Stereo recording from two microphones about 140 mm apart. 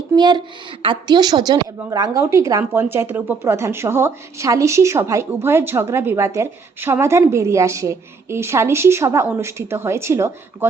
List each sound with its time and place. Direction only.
0.2 s a woman's voice: 30° right (ahead or behind)